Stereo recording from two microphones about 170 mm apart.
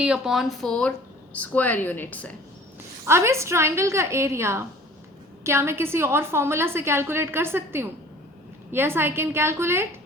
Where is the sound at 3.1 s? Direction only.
15° right (ahead or behind).